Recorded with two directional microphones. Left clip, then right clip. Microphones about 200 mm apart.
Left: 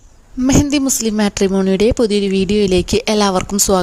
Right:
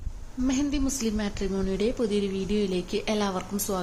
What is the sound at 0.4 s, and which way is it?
A woman's voice, 50° left (ahead or behind).